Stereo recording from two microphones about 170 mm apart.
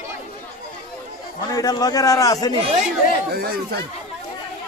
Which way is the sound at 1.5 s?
20° left (ahead or behind).